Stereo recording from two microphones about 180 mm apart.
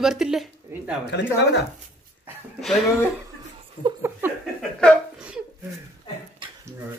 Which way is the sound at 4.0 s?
10° right (ahead or behind).